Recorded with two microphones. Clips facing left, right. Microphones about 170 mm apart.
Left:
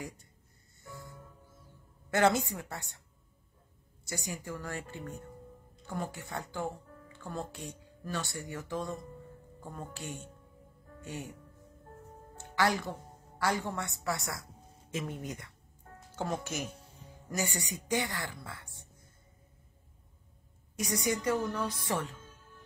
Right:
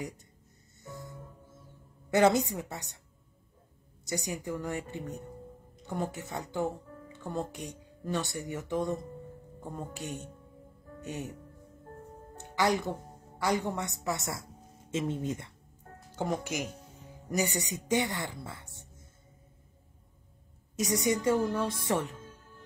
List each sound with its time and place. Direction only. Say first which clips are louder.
0.8 s music: right 4 dB; 20° right (ahead or behind)
2.0 s a woman's voice: right 3 dB; 20° right (ahead or behind)
4.0 s a woman's voice: right 5 dB; 20° right (ahead or behind)
12.4 s a woman's voice: right 2 dB; 20° right (ahead or behind)
20.7 s a woman's voice: right 4 dB; 25° right (ahead or behind)